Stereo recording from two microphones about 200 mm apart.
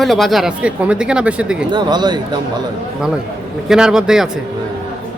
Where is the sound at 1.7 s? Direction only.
20° right (ahead or behind).